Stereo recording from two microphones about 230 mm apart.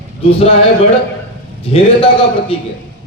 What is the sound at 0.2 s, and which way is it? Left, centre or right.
Speech, left.